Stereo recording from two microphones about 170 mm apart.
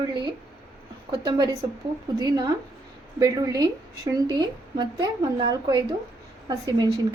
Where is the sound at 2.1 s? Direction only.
25° right (ahead or behind).